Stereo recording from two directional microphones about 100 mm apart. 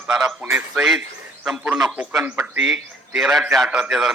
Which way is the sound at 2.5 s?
5° right (ahead or behind).